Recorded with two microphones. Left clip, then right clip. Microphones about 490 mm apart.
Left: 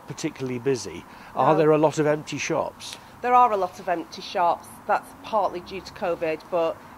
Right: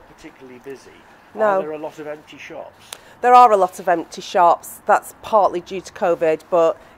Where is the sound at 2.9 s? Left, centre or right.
Right.